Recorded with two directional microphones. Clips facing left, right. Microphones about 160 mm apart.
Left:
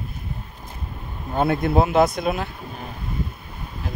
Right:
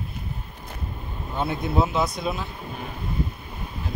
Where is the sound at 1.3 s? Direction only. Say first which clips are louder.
Left 5 dB; 60° left (ahead or behind).